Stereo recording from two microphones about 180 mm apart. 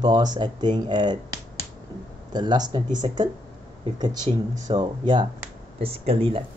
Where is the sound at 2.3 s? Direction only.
25° right (ahead or behind).